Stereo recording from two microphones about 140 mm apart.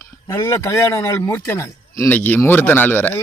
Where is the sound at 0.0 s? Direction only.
20° left (ahead or behind).